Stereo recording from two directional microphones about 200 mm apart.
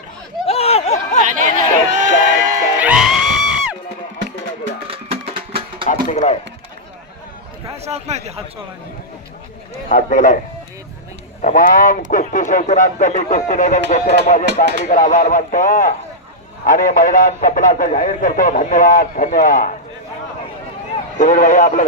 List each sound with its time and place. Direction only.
0.4 s a sound: 30° left (ahead or behind)
1.3 s run: 40° right (ahead or behind)
2.7 s music: 5° right (ahead or behind)
4.9 s music: 30° right (ahead or behind)
5.9 s a sound: 35° left (ahead or behind)
7.9 s a man's voice: 35° right (ahead or behind)
9.9 s speech: 40° left (ahead or behind)
11.4 s speech: 45° left (ahead or behind)
14.4 s speech: 60° right (ahead or behind)
14.8 s speech: 40° left (ahead or behind)
21.2 s speech: 40° left (ahead or behind)